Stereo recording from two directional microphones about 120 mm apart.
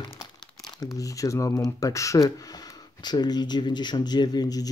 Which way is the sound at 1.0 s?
25° left (ahead or behind).